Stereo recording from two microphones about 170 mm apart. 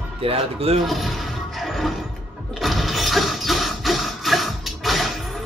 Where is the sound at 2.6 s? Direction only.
Centre (ahead or behind).